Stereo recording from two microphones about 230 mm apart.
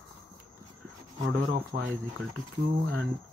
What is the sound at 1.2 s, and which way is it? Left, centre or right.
Speech, right.